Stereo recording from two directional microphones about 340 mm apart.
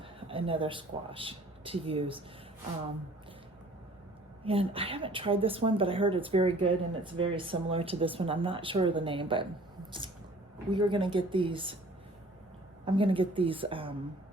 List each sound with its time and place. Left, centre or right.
0.0 s speech: centre
4.4 s speech: centre
10.7 s speech: centre
12.8 s speech: centre